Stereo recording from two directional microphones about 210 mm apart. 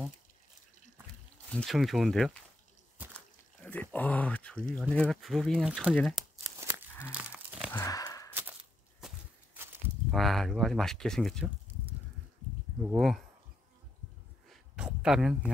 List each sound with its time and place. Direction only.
1.5 s speech: centre (ahead or behind)
3.0 s a sound: 10° right (ahead or behind)
3.6 s speech: 5° left (ahead or behind)
5.9 s crumpling: centre (ahead or behind)
6.6 s cattle: 10° right (ahead or behind)
7.7 s a sound: 15° left (ahead or behind)
9.0 s walk: 10° right (ahead or behind)
10.1 s speech: centre (ahead or behind)
14.5 s a sound: centre (ahead or behind)